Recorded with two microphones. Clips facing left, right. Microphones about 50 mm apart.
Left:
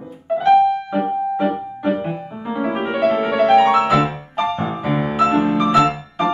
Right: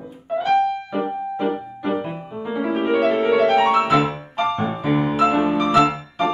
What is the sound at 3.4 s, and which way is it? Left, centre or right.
Music, centre.